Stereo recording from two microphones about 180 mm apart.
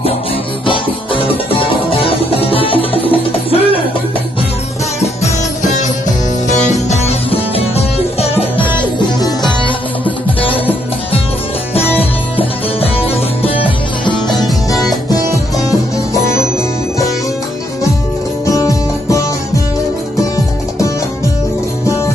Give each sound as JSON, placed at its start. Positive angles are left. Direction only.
{"t": 0.6, "sound": "music", "side_deg": 30}
{"t": 6.5, "sound": "music", "side_deg": 40}
{"t": 11.8, "sound": "music", "side_deg": 10}
{"t": 13.1, "sound": "music", "side_deg": 30}
{"t": 18.4, "sound": "music", "side_deg": 20}